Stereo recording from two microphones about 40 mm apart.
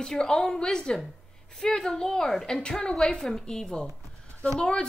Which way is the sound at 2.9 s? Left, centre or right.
Centre.